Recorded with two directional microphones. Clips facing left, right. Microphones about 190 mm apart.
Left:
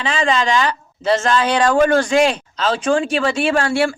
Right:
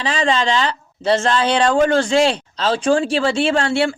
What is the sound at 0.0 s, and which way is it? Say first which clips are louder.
Speech: even; 35° right (ahead or behind).